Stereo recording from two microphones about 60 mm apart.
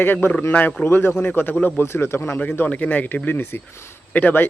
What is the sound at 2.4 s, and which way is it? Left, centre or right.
Speech, left.